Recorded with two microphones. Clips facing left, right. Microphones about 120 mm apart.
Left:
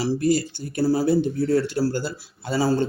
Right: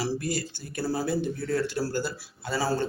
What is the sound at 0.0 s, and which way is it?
Speech, 25° left (ahead or behind).